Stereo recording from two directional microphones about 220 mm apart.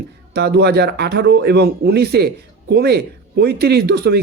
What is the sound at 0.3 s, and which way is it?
Speech, 50° right (ahead or behind).